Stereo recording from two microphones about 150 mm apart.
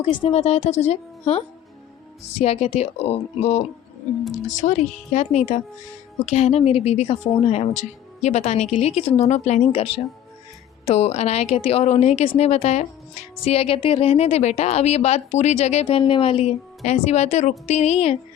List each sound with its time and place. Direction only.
0.1 s a woman's voice: 45° left (ahead or behind)